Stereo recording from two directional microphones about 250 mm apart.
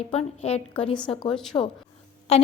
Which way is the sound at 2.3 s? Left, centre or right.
Left.